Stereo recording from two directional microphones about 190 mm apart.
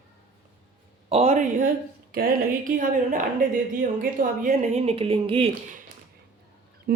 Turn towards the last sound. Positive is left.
turn(degrees=-55)  # may be behind; listen again after turning